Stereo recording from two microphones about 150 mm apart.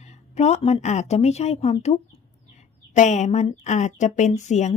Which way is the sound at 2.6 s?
50° left (ahead or behind).